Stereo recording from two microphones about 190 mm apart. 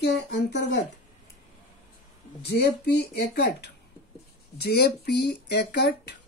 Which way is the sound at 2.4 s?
60° left (ahead or behind).